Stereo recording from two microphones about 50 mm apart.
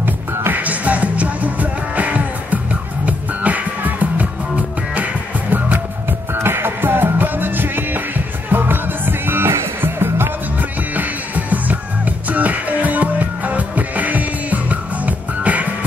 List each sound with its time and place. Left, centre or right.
0.5 s music: right
6.3 s music: right
10.6 s music: right